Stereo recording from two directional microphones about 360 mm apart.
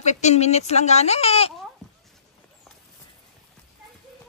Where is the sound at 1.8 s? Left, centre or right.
Centre.